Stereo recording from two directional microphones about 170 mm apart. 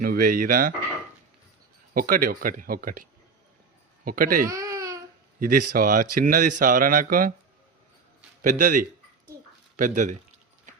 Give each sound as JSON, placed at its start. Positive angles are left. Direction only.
{"t": 0.0, "sound": "speech", "side_deg": -60}
{"t": 1.9, "sound": "speech", "side_deg": -55}
{"t": 4.4, "sound": "baby cry", "side_deg": -20}
{"t": 5.4, "sound": "speech", "side_deg": -55}
{"t": 8.4, "sound": "a man's voice", "side_deg": -50}